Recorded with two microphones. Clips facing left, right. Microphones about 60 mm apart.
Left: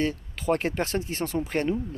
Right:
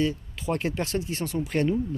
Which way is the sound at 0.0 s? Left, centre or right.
Left.